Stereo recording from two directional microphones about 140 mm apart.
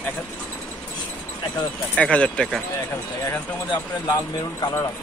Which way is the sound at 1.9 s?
10° left (ahead or behind).